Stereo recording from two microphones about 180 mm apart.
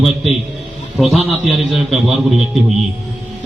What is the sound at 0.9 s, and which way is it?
A man's voice, centre (ahead or behind).